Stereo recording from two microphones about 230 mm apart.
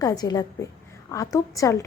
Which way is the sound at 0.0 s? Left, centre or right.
Centre.